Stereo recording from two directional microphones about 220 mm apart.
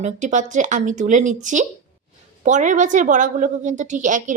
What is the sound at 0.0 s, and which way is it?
A woman's voice, 35° right (ahead or behind).